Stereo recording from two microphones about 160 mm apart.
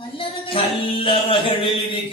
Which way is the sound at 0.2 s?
35° left (ahead or behind).